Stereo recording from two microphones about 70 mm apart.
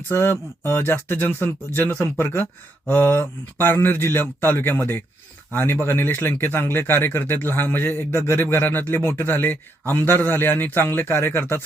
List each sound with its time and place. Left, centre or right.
0.1 s speech: left